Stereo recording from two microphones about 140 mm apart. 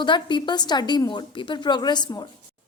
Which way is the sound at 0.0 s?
35° left (ahead or behind).